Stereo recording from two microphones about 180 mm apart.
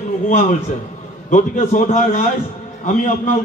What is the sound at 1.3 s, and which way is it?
A man's voice, 45° left (ahead or behind).